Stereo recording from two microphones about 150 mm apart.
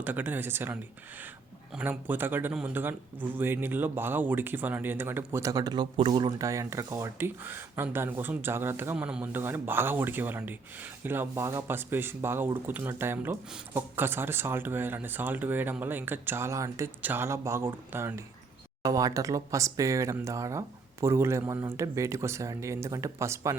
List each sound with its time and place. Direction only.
0.0 s speech: 10° right (ahead or behind)